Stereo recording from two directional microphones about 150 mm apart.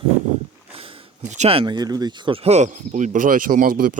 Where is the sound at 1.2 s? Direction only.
50° right (ahead or behind); by 4.0 s 70° right (ahead or behind).